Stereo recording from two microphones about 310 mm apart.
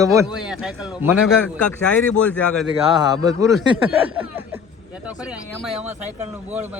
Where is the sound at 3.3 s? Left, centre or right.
Centre.